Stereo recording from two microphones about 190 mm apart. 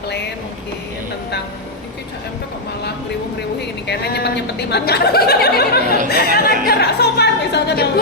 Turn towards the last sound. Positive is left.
turn(degrees=60)  # may be behind; listen again after turning